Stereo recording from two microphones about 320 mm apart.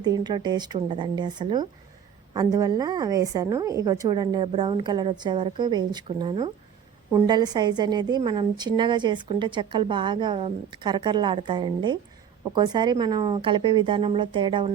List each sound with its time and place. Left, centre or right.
0.0 s a woman's voice: centre